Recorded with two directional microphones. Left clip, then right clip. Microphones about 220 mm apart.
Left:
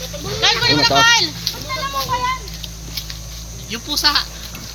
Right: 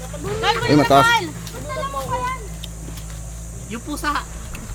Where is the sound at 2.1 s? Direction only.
30° left (ahead or behind).